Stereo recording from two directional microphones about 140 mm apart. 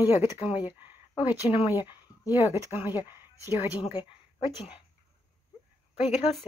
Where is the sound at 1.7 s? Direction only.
30° left (ahead or behind).